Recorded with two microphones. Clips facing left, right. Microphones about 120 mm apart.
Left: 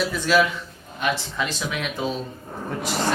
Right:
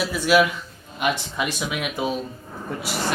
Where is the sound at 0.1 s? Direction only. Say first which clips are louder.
Right 2 dB; 10° right (ahead or behind).